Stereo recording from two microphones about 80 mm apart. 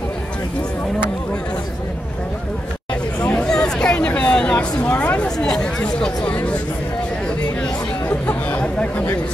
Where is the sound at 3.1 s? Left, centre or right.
Centre.